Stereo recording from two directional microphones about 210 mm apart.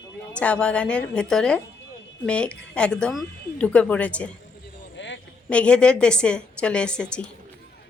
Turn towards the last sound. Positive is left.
turn(degrees=5)  # may be behind; listen again after turning